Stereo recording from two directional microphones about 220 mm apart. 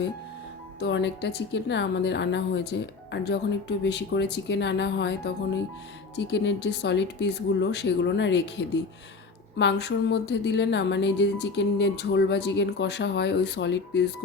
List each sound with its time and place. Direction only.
0.8 s a woman's voice: 50° left (ahead or behind)